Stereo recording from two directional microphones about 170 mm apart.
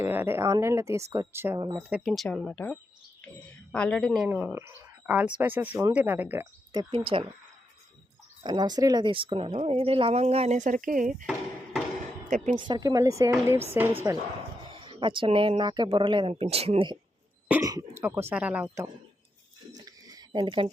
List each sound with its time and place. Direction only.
0.0 s speech: 15° right (ahead or behind)
1.9 s speech: centre (ahead or behind)
4.3 s speech: 10° right (ahead or behind)
6.7 s speech: 30° right (ahead or behind)
8.4 s speech: 25° right (ahead or behind); by 11.3 s 50° right (ahead or behind)
12.5 s speech: 25° right (ahead or behind)
14.7 s speech: 30° right (ahead or behind)
17.6 s speech: 20° right (ahead or behind)
19.7 s a sound: 20° right (ahead or behind)